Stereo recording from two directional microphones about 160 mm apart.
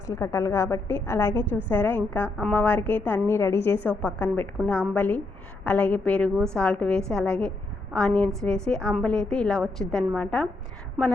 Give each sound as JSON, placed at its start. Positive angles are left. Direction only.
{"t": 0.1, "sound": "a woman's voice", "side_deg": 15}